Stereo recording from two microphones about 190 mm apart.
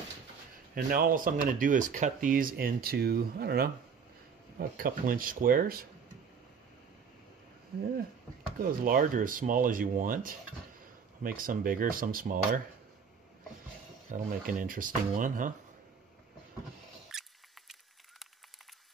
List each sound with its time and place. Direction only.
0.7 s speech: 50° right (ahead or behind)
8.5 s speech: 50° right (ahead or behind)
14.0 s speech: 45° right (ahead or behind)
17.1 s mouse: centre (ahead or behind)